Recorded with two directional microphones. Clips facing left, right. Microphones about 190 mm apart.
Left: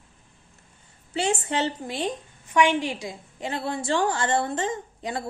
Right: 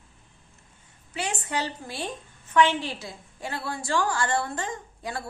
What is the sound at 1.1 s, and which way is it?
A woman's voice, 25° left (ahead or behind).